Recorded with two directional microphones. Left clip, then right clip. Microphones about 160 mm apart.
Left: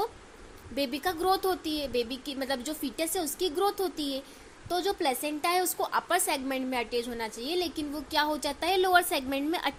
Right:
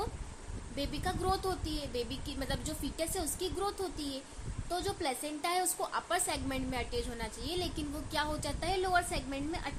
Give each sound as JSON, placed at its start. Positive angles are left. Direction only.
{"t": 0.8, "sound": "a woman's voice", "side_deg": 30}